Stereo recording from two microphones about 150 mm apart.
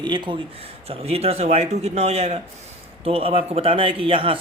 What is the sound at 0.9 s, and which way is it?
A man's voice, 45° right (ahead or behind).